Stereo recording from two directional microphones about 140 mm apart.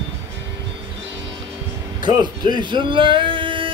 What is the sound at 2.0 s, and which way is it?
Speech, 30° right (ahead or behind).